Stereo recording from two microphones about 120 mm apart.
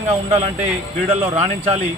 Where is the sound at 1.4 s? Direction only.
60° right (ahead or behind).